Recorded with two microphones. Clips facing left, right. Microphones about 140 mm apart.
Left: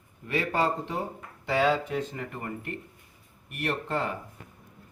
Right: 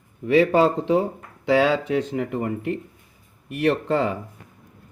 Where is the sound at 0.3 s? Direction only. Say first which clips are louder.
Right 10 dB; 90° right.